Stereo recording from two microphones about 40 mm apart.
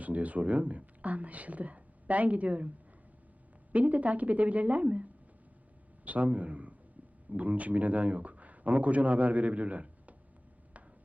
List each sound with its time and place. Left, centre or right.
0.0 s speech: right
6.1 s speech: right